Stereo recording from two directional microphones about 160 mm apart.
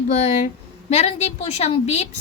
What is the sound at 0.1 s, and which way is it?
A woman's voice, 45° left (ahead or behind).